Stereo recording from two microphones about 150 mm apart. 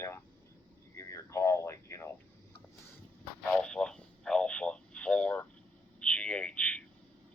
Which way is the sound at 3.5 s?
5° left (ahead or behind).